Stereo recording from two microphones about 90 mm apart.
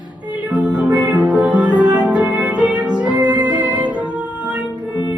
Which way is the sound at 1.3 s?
10° right (ahead or behind).